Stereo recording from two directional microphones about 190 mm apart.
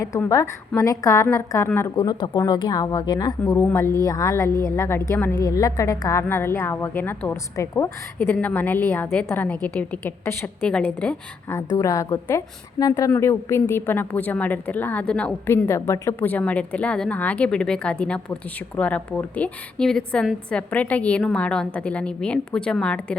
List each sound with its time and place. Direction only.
0.0 s a woman's voice: 15° left (ahead or behind)